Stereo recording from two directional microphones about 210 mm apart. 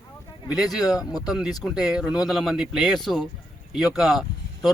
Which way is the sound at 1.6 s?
Centre (ahead or behind).